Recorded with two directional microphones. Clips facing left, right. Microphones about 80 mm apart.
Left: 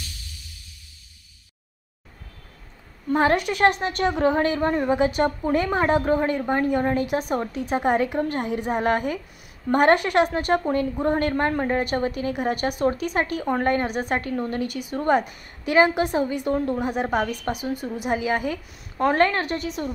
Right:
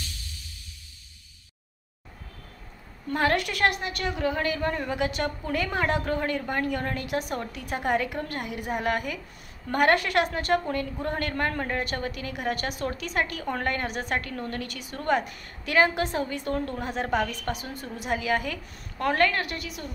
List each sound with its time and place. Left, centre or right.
3.1 s a woman's voice: left